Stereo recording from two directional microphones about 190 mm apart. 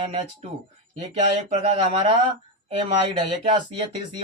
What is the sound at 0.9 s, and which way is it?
Speech, 40° right (ahead or behind).